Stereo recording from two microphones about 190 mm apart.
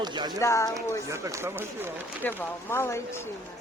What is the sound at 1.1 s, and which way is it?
Speech, 15° right (ahead or behind).